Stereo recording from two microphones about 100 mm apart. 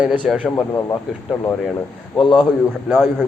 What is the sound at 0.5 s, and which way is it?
Speech, 35° left (ahead or behind).